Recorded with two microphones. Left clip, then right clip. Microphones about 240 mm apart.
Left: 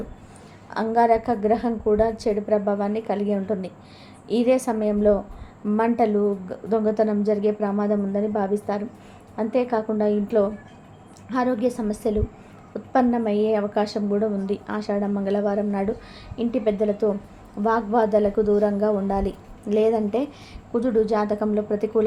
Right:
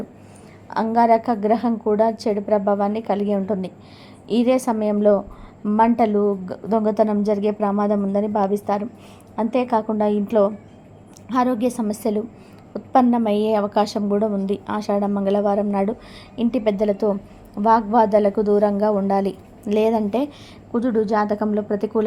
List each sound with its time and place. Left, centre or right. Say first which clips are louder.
0.7 s a woman's voice: right 3 dB; centre